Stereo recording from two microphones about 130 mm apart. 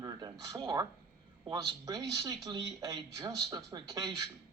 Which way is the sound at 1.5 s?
25° right (ahead or behind).